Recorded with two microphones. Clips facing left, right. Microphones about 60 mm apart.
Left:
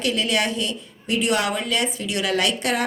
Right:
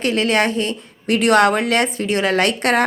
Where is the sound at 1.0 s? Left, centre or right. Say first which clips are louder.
Right 8 dB; right.